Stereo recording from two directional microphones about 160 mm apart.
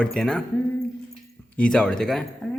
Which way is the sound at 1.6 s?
5° left (ahead or behind).